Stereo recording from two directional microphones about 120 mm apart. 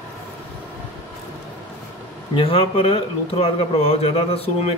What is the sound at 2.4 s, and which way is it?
Speech, 50° left (ahead or behind).